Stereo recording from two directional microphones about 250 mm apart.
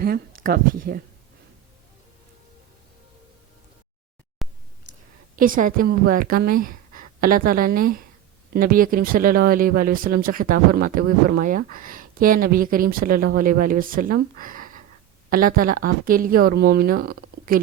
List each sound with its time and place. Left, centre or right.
0.0 s speech: right
4.4 s a sound: centre
5.4 s speech: right